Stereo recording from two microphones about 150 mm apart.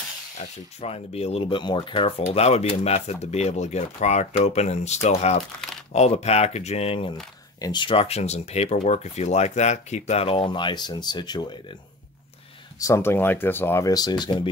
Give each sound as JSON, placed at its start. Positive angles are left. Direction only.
{"t": 0.7, "sound": "speech", "side_deg": 40}
{"t": 12.8, "sound": "speech", "side_deg": 15}